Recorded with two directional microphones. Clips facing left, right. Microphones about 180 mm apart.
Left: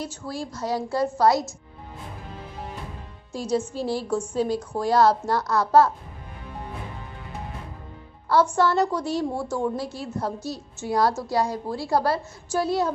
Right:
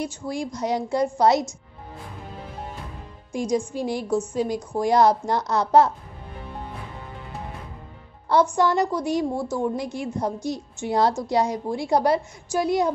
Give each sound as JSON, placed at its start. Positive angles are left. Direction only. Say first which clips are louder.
{"t": 0.2, "sound": "a woman's voice", "louder": "right 3 dB", "side_deg": -15}
{"t": 3.3, "sound": "a woman's voice", "louder": "right 1 dB", "side_deg": -15}
{"t": 8.5, "sound": "a woman's voice", "louder": "even", "side_deg": -10}